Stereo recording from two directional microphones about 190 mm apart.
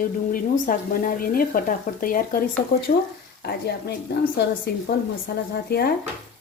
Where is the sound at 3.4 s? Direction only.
60° left (ahead or behind).